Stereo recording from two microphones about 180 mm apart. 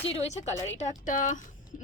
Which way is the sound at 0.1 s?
35° left (ahead or behind).